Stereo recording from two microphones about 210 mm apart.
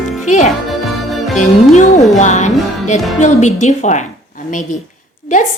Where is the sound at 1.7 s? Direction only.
35° left (ahead or behind).